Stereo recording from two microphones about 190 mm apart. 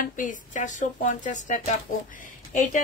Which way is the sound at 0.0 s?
45° left (ahead or behind).